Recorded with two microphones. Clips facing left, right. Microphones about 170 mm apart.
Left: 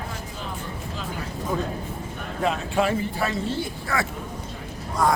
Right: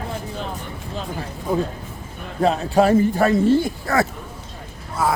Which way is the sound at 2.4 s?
35° right (ahead or behind).